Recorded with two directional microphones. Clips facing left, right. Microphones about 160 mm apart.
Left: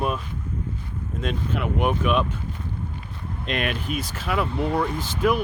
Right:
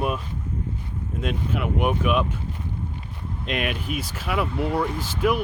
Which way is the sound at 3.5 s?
5° right (ahead or behind).